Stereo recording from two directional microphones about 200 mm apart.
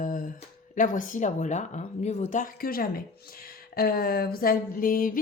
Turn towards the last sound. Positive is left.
turn(degrees=45)  # may be behind; listen again after turning